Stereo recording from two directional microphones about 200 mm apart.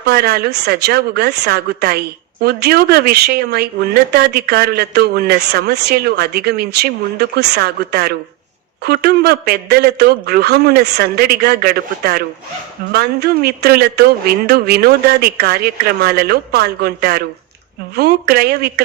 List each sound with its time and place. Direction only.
0.0 s a man's voice: 50° right (ahead or behind)